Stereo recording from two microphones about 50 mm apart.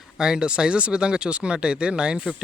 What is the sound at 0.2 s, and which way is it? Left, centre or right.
Speech, centre.